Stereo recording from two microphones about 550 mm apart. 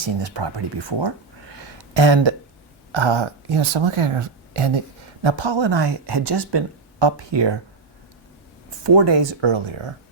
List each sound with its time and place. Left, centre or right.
0.0 s speech: right
8.8 s speech: right